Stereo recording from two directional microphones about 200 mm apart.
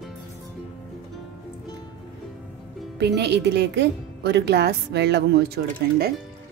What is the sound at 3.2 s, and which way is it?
Speech, 55° right (ahead or behind).